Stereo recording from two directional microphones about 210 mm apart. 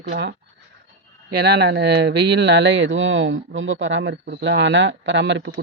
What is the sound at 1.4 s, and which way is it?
Speech, 55° right (ahead or behind).